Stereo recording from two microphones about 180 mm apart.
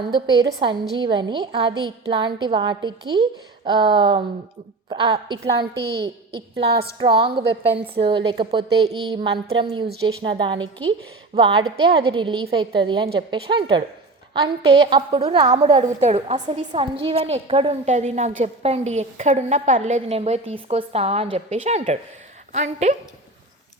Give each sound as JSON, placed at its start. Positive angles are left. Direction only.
{"t": 0.3, "sound": "a woman's voice", "side_deg": -20}
{"t": 5.5, "sound": "a woman's voice", "side_deg": -65}
{"t": 6.0, "sound": "a woman's voice", "side_deg": -30}
{"t": 15.8, "sound": "a woman's voice", "side_deg": -40}